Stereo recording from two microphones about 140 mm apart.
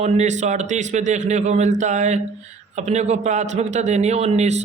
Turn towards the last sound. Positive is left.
turn(degrees=-55)  # may be behind; listen again after turning